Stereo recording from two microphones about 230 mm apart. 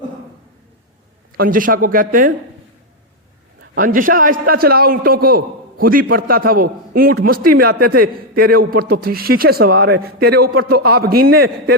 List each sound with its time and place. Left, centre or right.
1.4 s a man's voice: right
3.8 s a man's voice: right